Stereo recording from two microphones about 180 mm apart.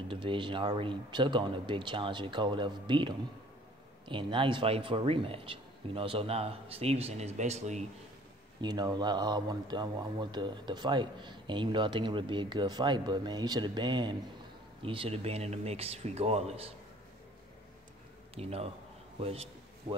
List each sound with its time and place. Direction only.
0.1 s a man's voice: 30° right (ahead or behind)
8.5 s a man's voice: 25° right (ahead or behind)
18.3 s a man's voice: 35° right (ahead or behind)